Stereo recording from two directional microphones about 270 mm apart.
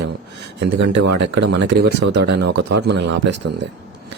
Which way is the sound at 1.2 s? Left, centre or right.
Right.